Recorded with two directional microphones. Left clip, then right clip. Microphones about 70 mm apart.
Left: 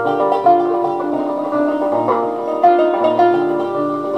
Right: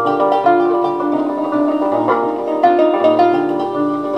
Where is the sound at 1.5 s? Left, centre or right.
Right.